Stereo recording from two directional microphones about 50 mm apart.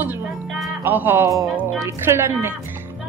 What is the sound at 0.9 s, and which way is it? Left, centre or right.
Speech, right.